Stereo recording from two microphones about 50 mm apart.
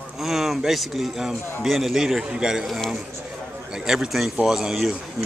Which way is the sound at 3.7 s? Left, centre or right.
Centre.